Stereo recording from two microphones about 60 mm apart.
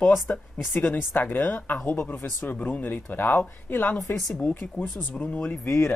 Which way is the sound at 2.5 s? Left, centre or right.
Left.